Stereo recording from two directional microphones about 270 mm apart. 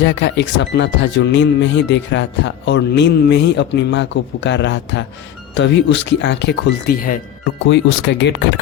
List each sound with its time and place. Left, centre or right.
0.0 s speech: left